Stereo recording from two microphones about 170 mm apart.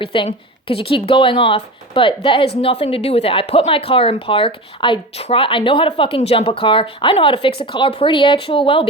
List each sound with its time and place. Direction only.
0.0 s a woman's voice: 30° left (ahead or behind)